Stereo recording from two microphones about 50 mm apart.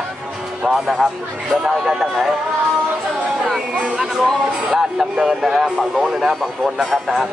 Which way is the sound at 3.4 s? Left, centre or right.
Centre.